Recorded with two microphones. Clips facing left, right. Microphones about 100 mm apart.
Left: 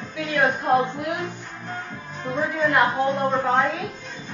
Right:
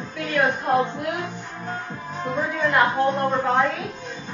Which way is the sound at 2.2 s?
Centre (ahead or behind).